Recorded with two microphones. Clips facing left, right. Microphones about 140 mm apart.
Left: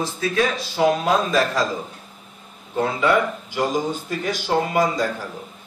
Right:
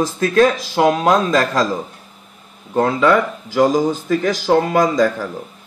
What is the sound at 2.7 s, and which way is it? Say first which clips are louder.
Speech: right 5 dB; 90° right.